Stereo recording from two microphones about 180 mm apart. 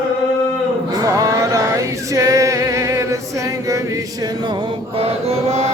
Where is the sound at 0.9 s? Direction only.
20° right (ahead or behind).